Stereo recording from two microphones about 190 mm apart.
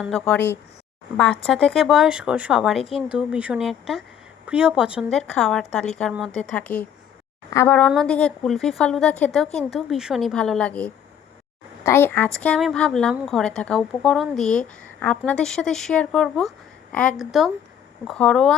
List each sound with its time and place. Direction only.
0.3 s speech: 10° left (ahead or behind)
2.8 s speech: 30° left (ahead or behind)
3.2 s speech: 5° right (ahead or behind)